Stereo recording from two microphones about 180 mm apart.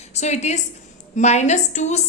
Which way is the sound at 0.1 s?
40° left (ahead or behind).